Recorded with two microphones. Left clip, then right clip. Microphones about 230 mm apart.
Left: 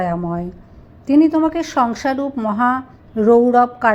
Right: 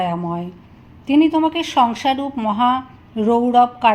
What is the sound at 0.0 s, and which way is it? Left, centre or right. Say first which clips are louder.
Speech: left 1 dB; left.